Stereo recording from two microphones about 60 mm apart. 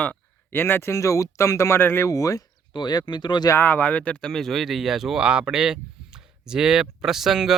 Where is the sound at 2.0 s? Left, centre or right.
Left.